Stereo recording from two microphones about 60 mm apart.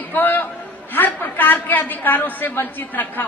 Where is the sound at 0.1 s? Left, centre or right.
Left.